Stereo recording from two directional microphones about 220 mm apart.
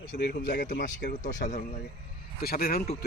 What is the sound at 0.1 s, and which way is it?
Speech, 45° left (ahead or behind).